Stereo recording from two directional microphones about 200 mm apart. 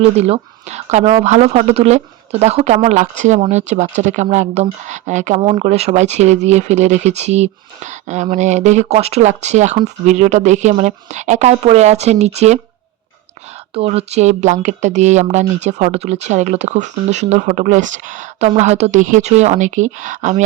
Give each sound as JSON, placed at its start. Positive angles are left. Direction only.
{"t": 0.2, "sound": "speech", "side_deg": -35}
{"t": 13.7, "sound": "speech", "side_deg": -30}